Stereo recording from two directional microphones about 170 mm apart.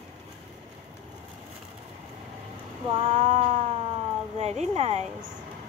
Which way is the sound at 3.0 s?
40° right (ahead or behind).